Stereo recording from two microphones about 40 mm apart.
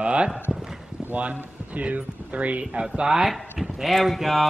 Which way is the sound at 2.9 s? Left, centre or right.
Centre.